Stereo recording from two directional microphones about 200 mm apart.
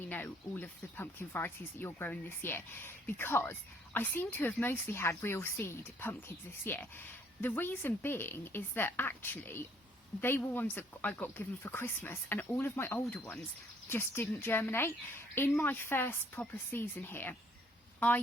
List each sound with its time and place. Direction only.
0.1 s speech: 10° left (ahead or behind)